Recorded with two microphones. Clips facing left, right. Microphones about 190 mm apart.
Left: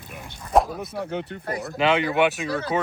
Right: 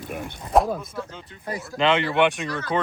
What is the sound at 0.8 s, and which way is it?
Speech, 65° left (ahead or behind).